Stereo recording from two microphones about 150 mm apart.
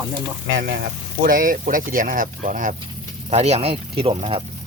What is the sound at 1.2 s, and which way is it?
Speech, 65° right (ahead or behind).